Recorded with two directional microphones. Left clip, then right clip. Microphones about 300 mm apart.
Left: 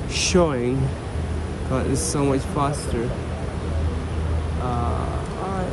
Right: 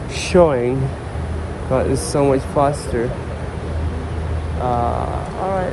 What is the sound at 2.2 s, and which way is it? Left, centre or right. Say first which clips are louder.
Speech: right 8 dB; centre.